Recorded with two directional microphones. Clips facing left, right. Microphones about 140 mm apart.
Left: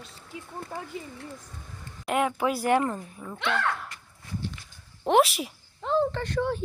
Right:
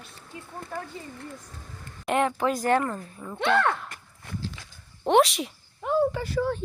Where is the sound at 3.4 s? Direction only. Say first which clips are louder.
Right 5 dB; 50° right (ahead or behind).